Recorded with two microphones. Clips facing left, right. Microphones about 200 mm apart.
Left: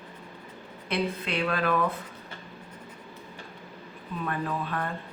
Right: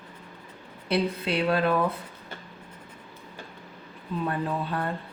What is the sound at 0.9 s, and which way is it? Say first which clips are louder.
Speech: right 3 dB; 30° right (ahead or behind).